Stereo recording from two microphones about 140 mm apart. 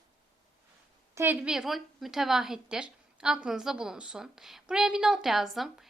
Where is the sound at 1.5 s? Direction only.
5° right (ahead or behind).